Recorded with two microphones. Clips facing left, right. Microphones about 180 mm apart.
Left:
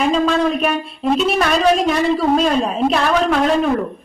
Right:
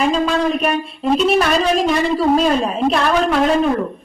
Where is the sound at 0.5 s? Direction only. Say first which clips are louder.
Even; centre (ahead or behind).